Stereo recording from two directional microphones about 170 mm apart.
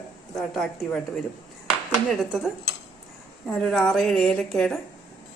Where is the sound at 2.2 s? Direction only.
5° right (ahead or behind).